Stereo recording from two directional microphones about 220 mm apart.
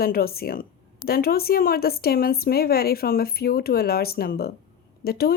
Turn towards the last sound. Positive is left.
turn(degrees=45)  # may be behind; listen again after turning